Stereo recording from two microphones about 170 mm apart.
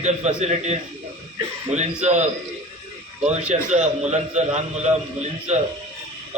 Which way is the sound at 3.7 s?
45° right (ahead or behind).